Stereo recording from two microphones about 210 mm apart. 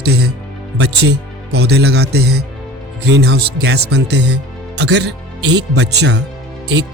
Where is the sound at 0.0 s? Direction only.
50° right (ahead or behind).